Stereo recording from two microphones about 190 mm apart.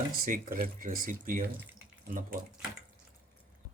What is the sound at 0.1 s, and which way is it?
Speech, 45° right (ahead or behind).